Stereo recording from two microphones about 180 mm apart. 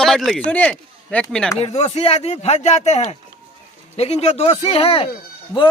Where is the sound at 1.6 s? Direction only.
35° left (ahead or behind).